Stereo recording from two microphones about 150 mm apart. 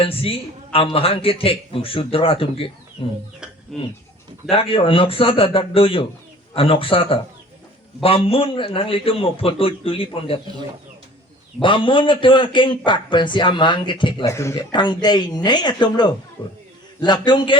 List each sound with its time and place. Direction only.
0.0 s a man's voice: 40° left (ahead or behind)
3.4 s a sound: 5° right (ahead or behind)
4.5 s a man's voice: 35° left (ahead or behind)
11.6 s a man's voice: 35° left (ahead or behind)
14.3 s speech: 20° left (ahead or behind)
14.5 s a man's voice: 30° left (ahead or behind)